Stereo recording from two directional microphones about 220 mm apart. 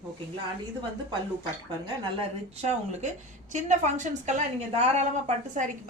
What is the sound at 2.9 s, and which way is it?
A woman's voice, 35° right (ahead or behind).